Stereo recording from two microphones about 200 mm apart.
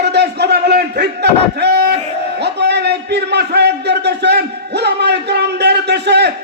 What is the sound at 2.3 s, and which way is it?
A man's voice, 55° right (ahead or behind).